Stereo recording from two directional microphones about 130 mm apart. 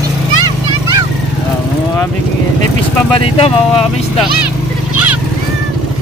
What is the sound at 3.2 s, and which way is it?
Speech, 50° left (ahead or behind).